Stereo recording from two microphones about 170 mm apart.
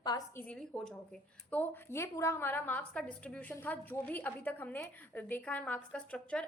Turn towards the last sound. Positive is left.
turn(degrees=5)  # may be behind; listen again after turning